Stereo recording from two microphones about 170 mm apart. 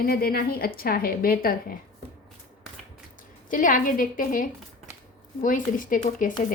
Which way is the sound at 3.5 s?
50° left (ahead or behind).